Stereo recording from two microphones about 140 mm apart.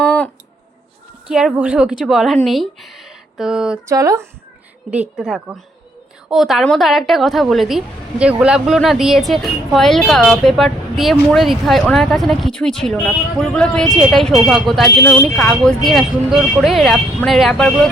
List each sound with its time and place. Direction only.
0.0 s a sound: 10° left (ahead or behind)
1.3 s a woman's voice: 5° right (ahead or behind)
3.8 s speech: 25° right (ahead or behind)
4.9 s a woman's voice: 5° right (ahead or behind)